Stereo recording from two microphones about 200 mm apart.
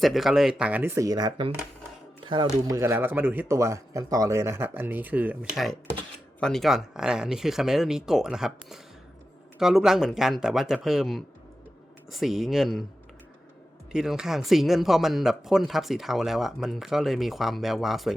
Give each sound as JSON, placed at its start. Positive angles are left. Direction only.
{"t": 0.0, "sound": "a man's voice", "side_deg": 0}
{"t": 13.9, "sound": "speech", "side_deg": -5}